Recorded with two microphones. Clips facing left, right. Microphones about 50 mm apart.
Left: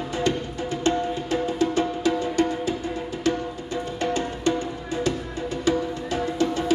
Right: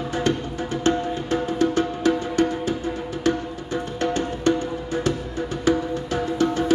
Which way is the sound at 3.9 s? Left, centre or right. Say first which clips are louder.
Right 2 dB; right.